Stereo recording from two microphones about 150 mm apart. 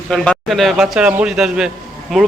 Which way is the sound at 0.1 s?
Centre (ahead or behind).